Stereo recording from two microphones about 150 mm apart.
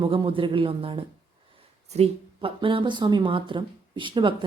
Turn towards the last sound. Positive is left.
turn(degrees=-35)  # may be behind; listen again after turning